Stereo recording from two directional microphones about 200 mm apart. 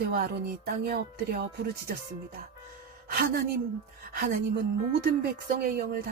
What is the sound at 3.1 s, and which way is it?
Speech, 50° right (ahead or behind).